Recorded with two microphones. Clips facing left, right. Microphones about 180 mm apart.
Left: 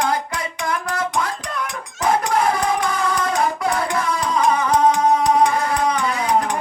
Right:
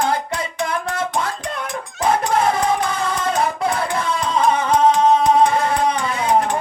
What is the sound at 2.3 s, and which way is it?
Music, 25° right (ahead or behind).